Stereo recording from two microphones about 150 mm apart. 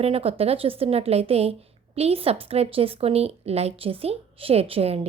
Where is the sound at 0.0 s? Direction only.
40° right (ahead or behind).